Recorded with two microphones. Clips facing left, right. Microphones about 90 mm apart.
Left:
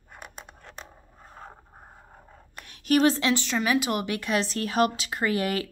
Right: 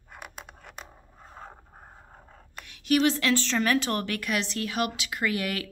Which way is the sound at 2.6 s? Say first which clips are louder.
Left 2 dB; 40° left (ahead or behind).